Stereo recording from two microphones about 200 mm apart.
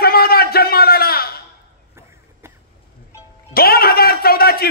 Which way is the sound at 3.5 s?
50° left (ahead or behind).